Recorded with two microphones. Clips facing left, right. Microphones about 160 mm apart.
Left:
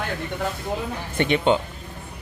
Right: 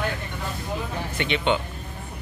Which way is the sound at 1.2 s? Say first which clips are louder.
Left 5 dB; 45° left (ahead or behind).